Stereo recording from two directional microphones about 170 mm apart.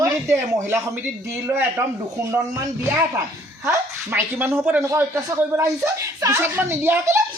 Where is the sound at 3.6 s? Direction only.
10° right (ahead or behind).